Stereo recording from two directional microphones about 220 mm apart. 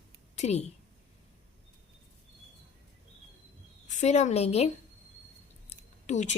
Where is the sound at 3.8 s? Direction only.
30° left (ahead or behind).